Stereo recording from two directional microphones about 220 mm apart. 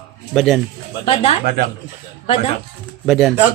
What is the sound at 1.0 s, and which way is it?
Speech, 25° left (ahead or behind).